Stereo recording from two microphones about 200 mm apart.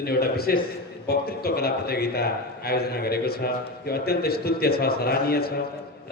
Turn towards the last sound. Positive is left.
turn(degrees=50)  # may be behind; listen again after turning